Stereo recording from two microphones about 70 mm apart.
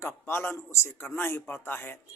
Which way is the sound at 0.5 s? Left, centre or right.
Left.